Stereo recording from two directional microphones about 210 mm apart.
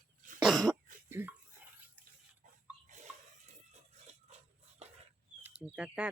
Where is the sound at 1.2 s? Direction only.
10° right (ahead or behind).